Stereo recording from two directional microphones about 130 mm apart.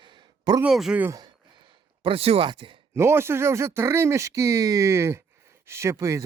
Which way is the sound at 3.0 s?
20° right (ahead or behind).